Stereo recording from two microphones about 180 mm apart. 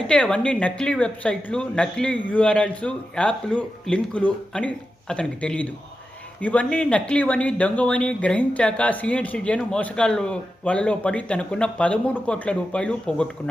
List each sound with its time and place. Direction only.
0.1 s speech: 5° left (ahead or behind)